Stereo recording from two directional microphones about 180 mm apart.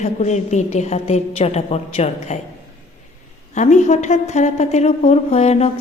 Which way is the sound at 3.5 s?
40° left (ahead or behind).